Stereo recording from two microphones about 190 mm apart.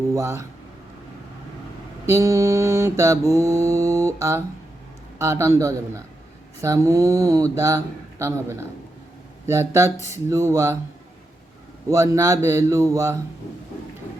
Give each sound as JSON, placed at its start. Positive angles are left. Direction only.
{"t": 0.1, "sound": "mantra", "side_deg": -15}
{"t": 2.0, "sound": "mantra", "side_deg": -15}
{"t": 9.5, "sound": "mantra", "side_deg": -15}
{"t": 11.9, "sound": "mantra", "side_deg": -15}